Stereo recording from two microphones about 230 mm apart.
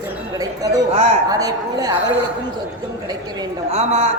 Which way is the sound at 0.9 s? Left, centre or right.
Right.